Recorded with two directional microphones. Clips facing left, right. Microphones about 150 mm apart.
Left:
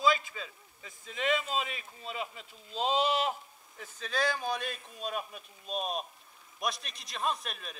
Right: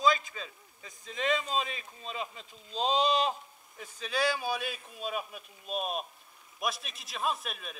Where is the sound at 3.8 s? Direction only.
10° right (ahead or behind).